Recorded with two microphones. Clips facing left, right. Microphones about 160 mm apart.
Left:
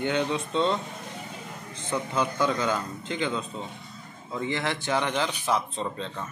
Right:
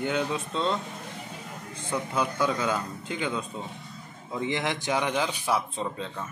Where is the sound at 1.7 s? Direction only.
10° right (ahead or behind).